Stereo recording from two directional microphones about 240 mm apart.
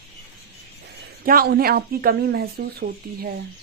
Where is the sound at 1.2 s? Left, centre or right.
Right.